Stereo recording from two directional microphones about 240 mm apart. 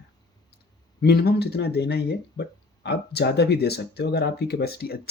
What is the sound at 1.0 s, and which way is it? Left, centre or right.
Speech, left.